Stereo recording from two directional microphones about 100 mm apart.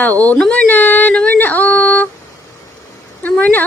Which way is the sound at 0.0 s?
15° left (ahead or behind).